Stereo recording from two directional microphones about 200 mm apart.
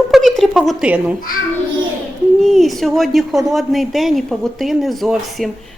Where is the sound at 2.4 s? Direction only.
Centre (ahead or behind).